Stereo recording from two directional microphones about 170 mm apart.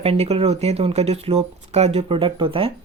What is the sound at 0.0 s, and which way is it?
Speech, 35° right (ahead or behind).